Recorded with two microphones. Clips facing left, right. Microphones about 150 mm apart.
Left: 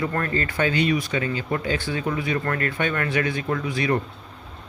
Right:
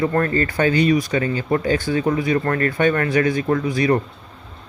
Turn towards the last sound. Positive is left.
turn(degrees=-40)  # may be behind; listen again after turning